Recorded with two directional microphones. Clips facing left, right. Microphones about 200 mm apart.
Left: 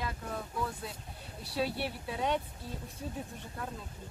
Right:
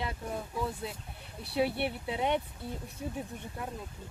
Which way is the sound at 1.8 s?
20° right (ahead or behind).